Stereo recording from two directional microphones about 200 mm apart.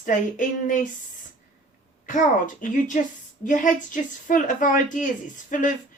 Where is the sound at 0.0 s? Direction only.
40° left (ahead or behind).